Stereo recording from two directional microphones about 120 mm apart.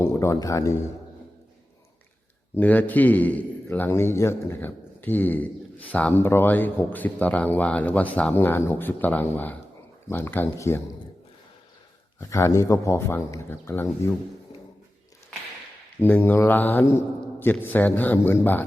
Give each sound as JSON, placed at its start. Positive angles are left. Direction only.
{"t": 0.0, "sound": "a man's voice", "side_deg": 20}
{"t": 2.6, "sound": "a man's voice", "side_deg": 15}
{"t": 12.3, "sound": "a man's voice", "side_deg": 25}
{"t": 16.0, "sound": "a man's voice", "side_deg": 15}